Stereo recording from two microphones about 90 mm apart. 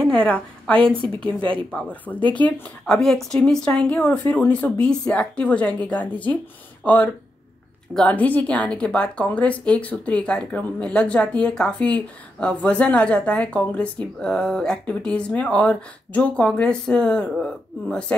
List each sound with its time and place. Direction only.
0.0 s a woman's voice: 10° left (ahead or behind)
3.0 s speech: 5° left (ahead or behind)
8.1 s speech: 15° left (ahead or behind)